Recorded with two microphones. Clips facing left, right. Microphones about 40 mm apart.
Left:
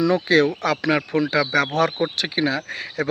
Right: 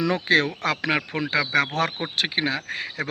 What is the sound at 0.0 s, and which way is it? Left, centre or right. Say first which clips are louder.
Speech: left 4 dB; right.